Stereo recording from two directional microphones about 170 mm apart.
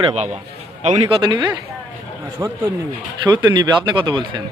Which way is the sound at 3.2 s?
25° right (ahead or behind).